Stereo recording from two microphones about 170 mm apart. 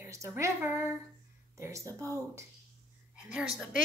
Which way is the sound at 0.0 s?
15° right (ahead or behind).